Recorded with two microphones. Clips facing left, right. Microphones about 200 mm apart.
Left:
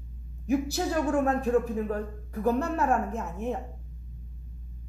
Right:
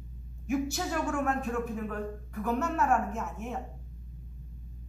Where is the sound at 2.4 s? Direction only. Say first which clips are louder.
Left 3 dB; 35° left (ahead or behind).